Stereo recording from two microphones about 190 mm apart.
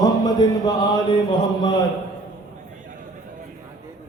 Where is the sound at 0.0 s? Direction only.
20° left (ahead or behind).